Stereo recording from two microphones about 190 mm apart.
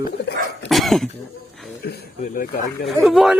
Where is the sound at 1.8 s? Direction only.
55° left (ahead or behind).